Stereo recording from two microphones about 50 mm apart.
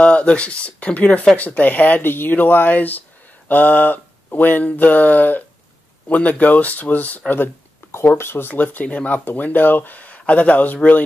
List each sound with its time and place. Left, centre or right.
0.0 s speech: left
8.1 s speech: left
8.5 s speech: left